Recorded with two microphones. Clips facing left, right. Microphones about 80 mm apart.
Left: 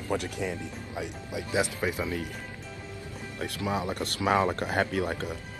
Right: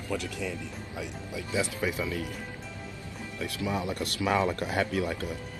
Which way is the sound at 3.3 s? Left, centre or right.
Left.